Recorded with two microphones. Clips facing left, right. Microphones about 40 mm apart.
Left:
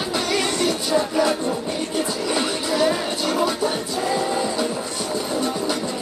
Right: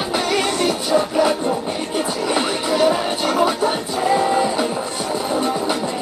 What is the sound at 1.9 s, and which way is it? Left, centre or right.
Music, right.